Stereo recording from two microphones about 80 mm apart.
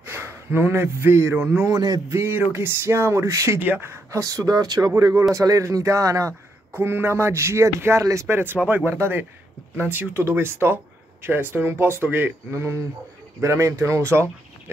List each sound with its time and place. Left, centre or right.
0.0 s a man's voice: right
3.6 s speech: right
3.9 s speech: right
6.8 s speech: right